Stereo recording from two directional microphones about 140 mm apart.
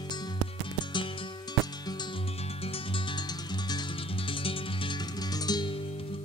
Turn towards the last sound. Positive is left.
turn(degrees=30)  # may be behind; listen again after turning